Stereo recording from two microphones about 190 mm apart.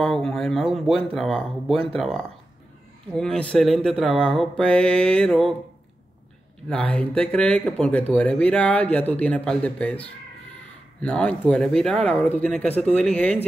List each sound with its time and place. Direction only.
0.0 s a sound: 5° left (ahead or behind)
0.7 s speech: centre (ahead or behind)
6.7 s speech: 5° left (ahead or behind)